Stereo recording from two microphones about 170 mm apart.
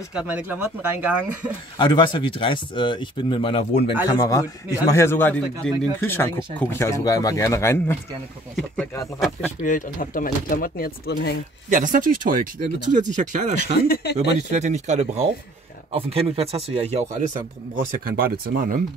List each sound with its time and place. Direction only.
0.1 s speech: 5° right (ahead or behind)
1.8 s speech: 30° left (ahead or behind)
4.0 s speech: 20° left (ahead or behind)
9.6 s speech: 50° left (ahead or behind)
11.7 s speech: 50° right (ahead or behind)
13.8 s speech: 70° left (ahead or behind)
14.5 s speech: 45° right (ahead or behind)
18.0 s speech: 60° right (ahead or behind)